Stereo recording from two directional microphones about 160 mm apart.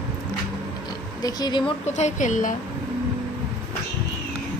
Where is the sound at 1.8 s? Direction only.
45° left (ahead or behind).